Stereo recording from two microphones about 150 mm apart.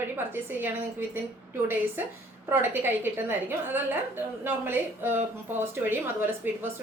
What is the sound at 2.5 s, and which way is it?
A woman's voice, 15° right (ahead or behind).